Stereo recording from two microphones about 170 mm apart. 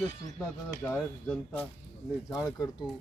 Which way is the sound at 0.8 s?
15° left (ahead or behind).